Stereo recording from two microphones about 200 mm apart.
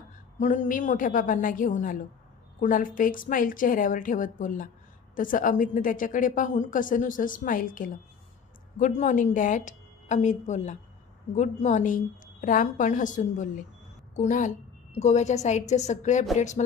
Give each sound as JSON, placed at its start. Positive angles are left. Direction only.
{"t": 0.4, "sound": "a woman's voice", "side_deg": 40}